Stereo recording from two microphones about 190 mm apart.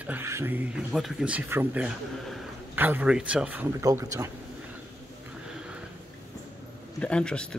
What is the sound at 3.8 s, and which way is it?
Speech, 15° right (ahead or behind).